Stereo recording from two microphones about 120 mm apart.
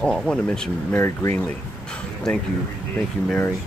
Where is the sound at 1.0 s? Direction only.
20° left (ahead or behind).